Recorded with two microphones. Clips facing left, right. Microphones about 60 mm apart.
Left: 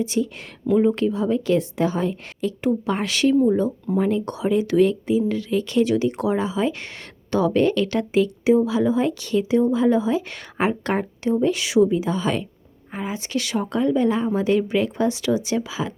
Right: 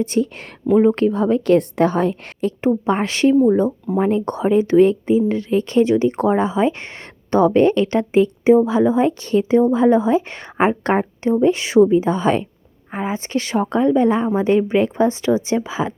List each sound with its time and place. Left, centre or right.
0.0 s a woman's voice: right
2.6 s speech: right